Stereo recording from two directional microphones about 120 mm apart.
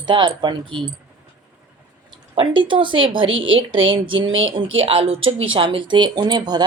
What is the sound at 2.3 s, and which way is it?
Speech, 45° right (ahead or behind).